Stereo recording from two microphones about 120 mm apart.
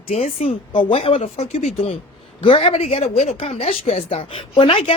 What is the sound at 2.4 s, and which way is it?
Speech, 50° left (ahead or behind).